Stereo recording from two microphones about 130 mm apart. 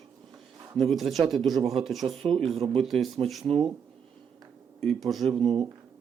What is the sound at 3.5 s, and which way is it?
Speech, 50° right (ahead or behind).